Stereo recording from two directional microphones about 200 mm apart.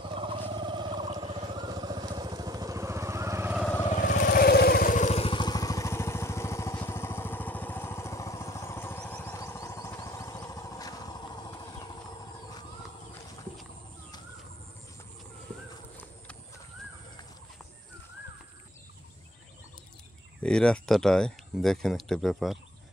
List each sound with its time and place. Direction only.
0.1 s vehicle: 25° right (ahead or behind)
4.1 s vehicle: 45° left (ahead or behind); by 12.0 s 20° left (ahead or behind)
20.4 s speech: 5° left (ahead or behind)